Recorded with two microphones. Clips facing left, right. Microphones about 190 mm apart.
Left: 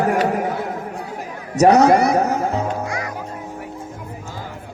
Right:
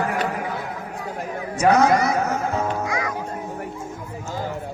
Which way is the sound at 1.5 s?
40° left (ahead or behind).